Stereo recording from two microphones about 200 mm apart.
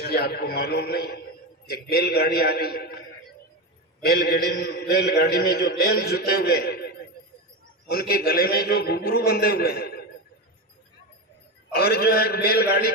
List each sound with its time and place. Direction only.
0.0 s a man's voice: 50° left (ahead or behind)
4.0 s a man's voice: 50° left (ahead or behind)
11.7 s a man's voice: 50° left (ahead or behind)